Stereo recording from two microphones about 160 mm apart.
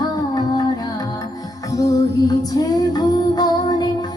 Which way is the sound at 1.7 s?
20° left (ahead or behind).